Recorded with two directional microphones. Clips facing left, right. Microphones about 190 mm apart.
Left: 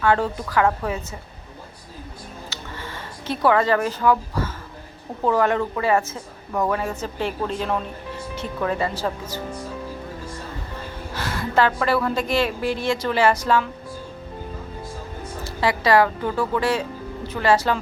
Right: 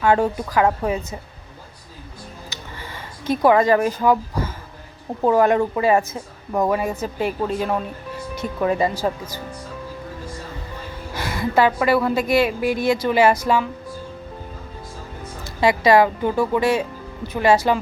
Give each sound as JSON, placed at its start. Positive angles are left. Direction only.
{"t": 0.0, "sound": "a woman's voice", "side_deg": -15}
{"t": 3.2, "sound": "a woman's voice", "side_deg": -15}
{"t": 11.1, "sound": "a woman's voice", "side_deg": -10}
{"t": 15.6, "sound": "a woman's voice", "side_deg": -20}